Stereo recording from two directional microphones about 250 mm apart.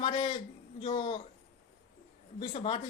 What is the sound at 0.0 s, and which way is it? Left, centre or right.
A man's voice, left.